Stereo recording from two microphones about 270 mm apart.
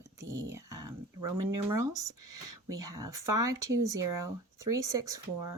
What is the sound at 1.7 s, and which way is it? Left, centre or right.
Speech, centre.